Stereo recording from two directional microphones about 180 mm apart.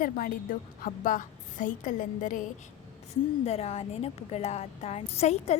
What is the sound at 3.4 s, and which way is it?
A woman's voice, 35° left (ahead or behind).